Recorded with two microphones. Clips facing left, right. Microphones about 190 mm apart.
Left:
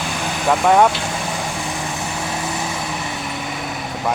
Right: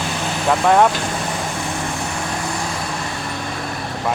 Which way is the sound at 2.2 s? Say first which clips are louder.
Even; 5° left (ahead or behind).